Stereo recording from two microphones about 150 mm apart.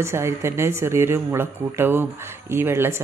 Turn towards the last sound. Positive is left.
turn(degrees=-15)  # may be behind; listen again after turning